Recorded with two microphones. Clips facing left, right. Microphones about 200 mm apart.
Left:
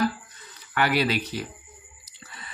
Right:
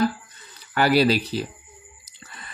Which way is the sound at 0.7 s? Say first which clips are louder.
Right 5 dB; 35° right (ahead or behind).